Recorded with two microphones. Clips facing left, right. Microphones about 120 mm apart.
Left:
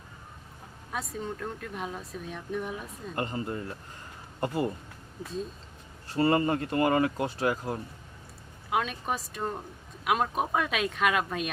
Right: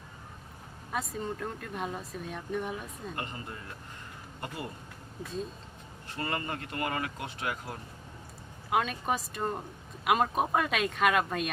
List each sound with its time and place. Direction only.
0.9 s speech: centre (ahead or behind)
3.2 s speech: 35° left (ahead or behind)
6.1 s speech: 35° left (ahead or behind)
8.7 s speech: centre (ahead or behind)